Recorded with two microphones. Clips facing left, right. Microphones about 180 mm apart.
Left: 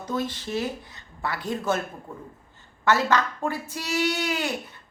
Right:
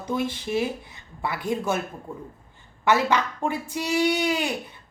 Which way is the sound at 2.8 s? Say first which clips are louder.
Right 1 dB; 15° right (ahead or behind).